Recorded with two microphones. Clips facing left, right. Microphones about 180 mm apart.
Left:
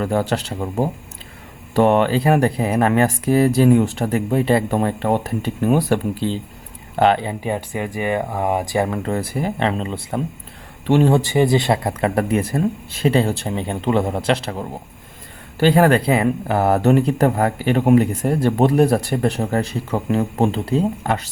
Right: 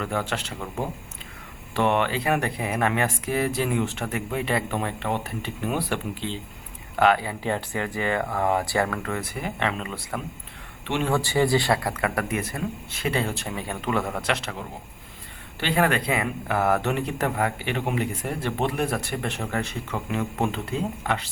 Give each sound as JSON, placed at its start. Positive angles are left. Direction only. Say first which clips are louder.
{"t": 0.0, "sound": "speech", "louder": "left 8 dB", "side_deg": 35}
{"t": 6.9, "sound": "speech", "louder": "left 4 dB", "side_deg": 30}
{"t": 7.4, "sound": "speech", "louder": "left 4 dB", "side_deg": 15}
{"t": 9.0, "sound": "speech", "louder": "left 8 dB", "side_deg": 35}
{"t": 10.8, "sound": "speech", "louder": "left 11 dB", "side_deg": 40}
{"t": 11.1, "sound": "speech", "louder": "left 6 dB", "side_deg": 20}